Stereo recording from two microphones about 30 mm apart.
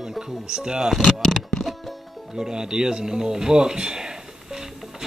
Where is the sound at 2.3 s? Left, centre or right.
Right.